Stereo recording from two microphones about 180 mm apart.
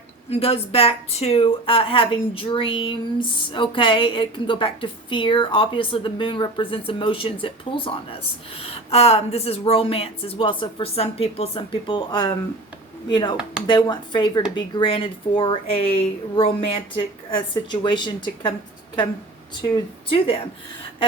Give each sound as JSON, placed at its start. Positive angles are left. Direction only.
{"t": 0.3, "sound": "speech", "side_deg": 35}
{"t": 13.7, "sound": "speech", "side_deg": 25}
{"t": 19.7, "sound": "speech", "side_deg": 30}